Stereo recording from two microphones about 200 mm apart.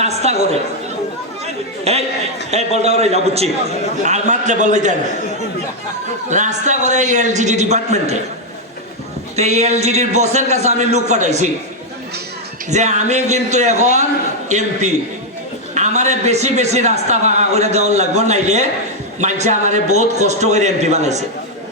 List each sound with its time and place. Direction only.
0.0 s chatter: 35° right (ahead or behind)
1.8 s a man's voice: 30° right (ahead or behind)
6.3 s a man's voice: 35° right (ahead or behind)
9.3 s a man's voice: 35° right (ahead or behind)
12.7 s a man's voice: 35° right (ahead or behind)